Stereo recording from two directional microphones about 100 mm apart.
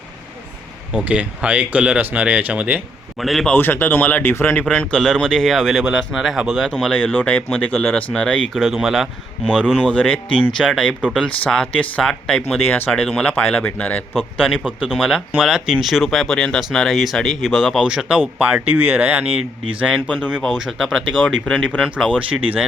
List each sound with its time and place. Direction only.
0.9 s speech: 15° right (ahead or behind)
3.2 s speech: centre (ahead or behind)
3.5 s speech: 20° left (ahead or behind)
4.9 s speech: 5° left (ahead or behind)
6.7 s speech: 10° left (ahead or behind)
9.9 s speech: 10° left (ahead or behind)
12.6 s speech: 20° left (ahead or behind)
12.9 s speech: 10° left (ahead or behind)
14.1 s speech: 5° right (ahead or behind)